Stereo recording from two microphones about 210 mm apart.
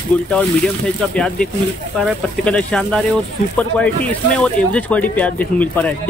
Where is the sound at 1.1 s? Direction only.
5° left (ahead or behind).